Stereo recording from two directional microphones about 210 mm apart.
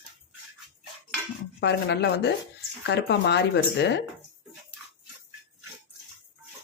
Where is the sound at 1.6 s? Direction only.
55° left (ahead or behind).